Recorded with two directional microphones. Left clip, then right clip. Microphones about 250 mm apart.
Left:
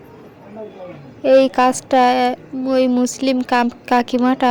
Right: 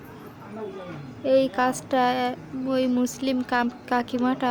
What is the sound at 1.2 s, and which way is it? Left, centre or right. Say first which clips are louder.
Speech: left 9 dB; left.